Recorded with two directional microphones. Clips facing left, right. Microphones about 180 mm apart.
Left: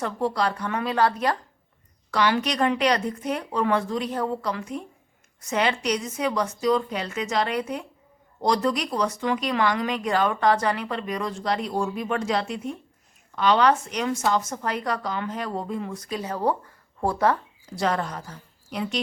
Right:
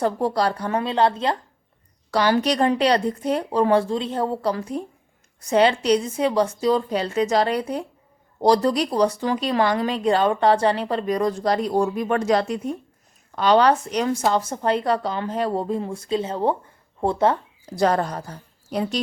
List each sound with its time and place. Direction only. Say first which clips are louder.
0.0 s speech: right 4 dB; 35° right (ahead or behind)
2.0 s speech: right 4 dB; 35° right (ahead or behind)
17.7 s a woman's voice: right 5 dB; 40° right (ahead or behind)